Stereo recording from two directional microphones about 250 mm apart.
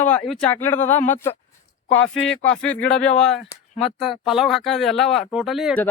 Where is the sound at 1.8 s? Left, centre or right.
Left.